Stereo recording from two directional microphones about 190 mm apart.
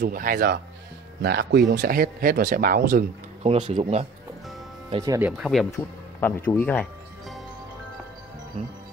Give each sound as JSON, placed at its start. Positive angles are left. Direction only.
{"t": 0.0, "sound": "speech", "side_deg": -45}
{"t": 3.4, "sound": "speech", "side_deg": -30}
{"t": 5.0, "sound": "speech", "side_deg": -15}
{"t": 5.4, "sound": "speech", "side_deg": 0}